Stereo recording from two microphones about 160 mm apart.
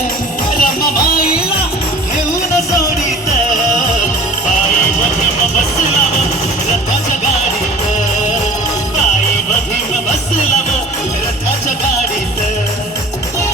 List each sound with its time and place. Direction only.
0.5 s music: 65° left (ahead or behind)